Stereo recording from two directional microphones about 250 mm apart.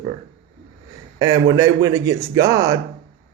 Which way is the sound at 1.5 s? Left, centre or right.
Centre.